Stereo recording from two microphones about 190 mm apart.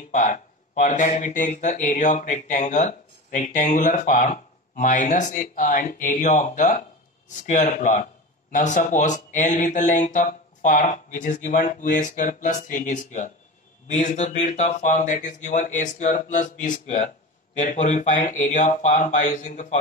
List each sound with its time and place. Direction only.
0.1 s speech: 40° left (ahead or behind)